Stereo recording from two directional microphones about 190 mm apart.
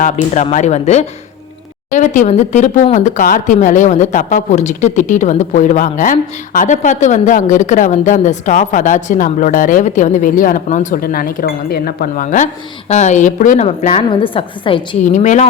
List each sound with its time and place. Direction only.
0.5 s speech: 35° left (ahead or behind)
15.0 s speech: 40° left (ahead or behind)